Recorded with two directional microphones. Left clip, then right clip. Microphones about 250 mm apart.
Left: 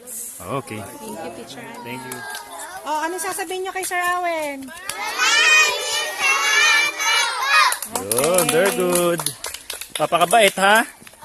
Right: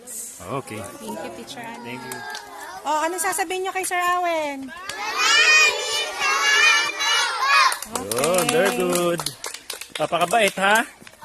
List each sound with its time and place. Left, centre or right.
0.4 s speech: centre
2.8 s speech: right
4.9 s crowd: centre
8.2 s speech: centre